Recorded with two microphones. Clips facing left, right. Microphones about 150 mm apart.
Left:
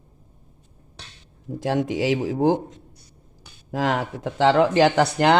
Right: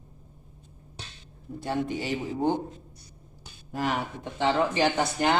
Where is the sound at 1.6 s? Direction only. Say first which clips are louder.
Left 7 dB; 90° left.